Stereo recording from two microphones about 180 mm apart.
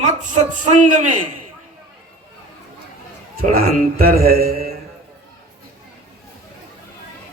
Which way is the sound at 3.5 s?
55° right (ahead or behind).